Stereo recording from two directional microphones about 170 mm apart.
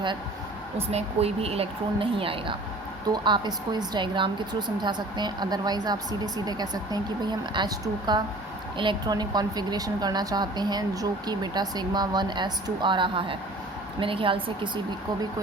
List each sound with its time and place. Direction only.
0.9 s a woman's voice: 35° right (ahead or behind)